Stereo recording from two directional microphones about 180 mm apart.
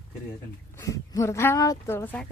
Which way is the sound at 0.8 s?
15° left (ahead or behind).